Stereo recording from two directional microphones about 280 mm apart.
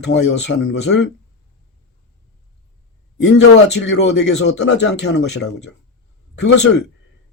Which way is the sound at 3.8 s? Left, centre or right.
Left.